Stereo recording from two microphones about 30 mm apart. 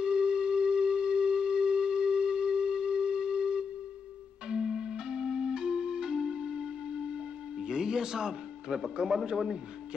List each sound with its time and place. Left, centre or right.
0.0 s a sound: right
4.5 s music: centre
8.8 s a man's voice: right